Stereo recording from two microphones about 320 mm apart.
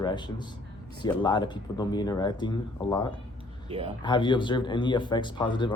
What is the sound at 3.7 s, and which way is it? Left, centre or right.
Speech, centre.